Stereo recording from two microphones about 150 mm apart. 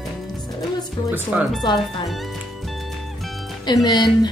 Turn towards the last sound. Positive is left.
turn(degrees=25)  # may be behind; listen again after turning